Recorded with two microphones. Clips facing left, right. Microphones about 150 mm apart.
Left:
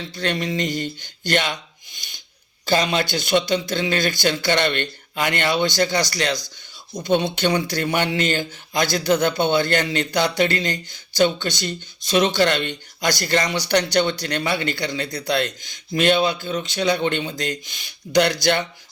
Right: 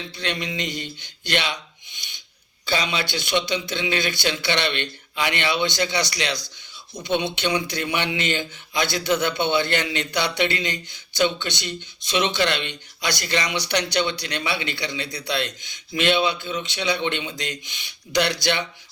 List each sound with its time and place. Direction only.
0.2 s speech: 45° left (ahead or behind)
2.6 s speech: 45° left (ahead or behind)